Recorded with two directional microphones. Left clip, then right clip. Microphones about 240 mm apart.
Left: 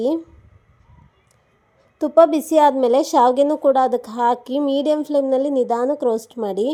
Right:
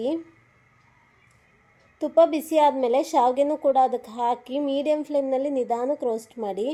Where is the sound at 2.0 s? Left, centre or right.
Left.